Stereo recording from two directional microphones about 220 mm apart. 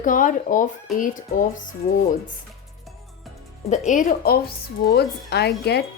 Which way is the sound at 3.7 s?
35° left (ahead or behind).